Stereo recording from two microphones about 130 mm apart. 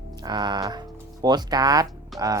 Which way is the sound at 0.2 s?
35° right (ahead or behind).